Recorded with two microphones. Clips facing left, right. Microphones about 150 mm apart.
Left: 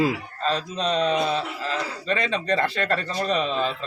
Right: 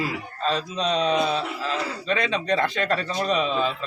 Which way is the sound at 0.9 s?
35° right (ahead or behind).